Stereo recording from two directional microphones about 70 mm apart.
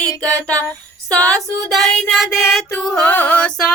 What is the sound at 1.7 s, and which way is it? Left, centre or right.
Child singing, centre.